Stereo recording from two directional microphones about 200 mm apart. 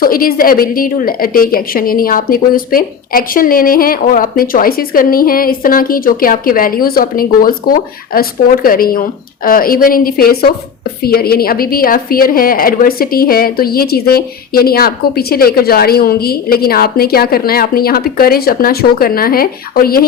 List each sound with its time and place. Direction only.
0.0 s a woman's voice: 45° left (ahead or behind)